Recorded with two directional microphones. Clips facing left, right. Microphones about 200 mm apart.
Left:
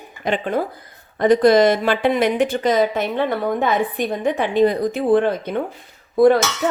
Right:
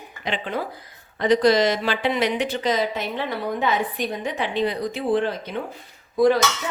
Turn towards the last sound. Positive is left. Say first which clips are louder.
# left 5 dB
turn(degrees=55)  # may be behind; listen again after turning